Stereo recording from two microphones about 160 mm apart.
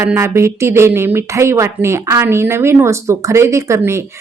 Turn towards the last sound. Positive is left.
turn(degrees=-15)  # may be behind; listen again after turning